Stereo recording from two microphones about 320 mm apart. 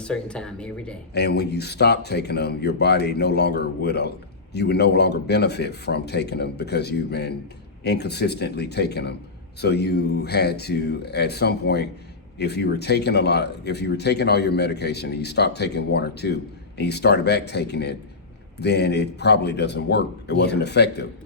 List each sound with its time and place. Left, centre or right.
0.0 s speech: centre
1.1 s speech: left